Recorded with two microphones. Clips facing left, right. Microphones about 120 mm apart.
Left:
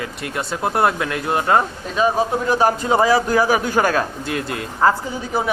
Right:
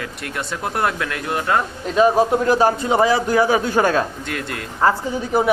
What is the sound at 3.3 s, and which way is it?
Speech, 25° right (ahead or behind).